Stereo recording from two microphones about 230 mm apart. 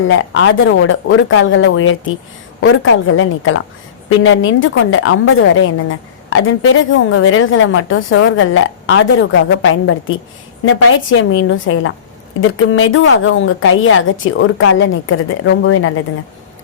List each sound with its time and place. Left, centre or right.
0.1 s a woman's voice: left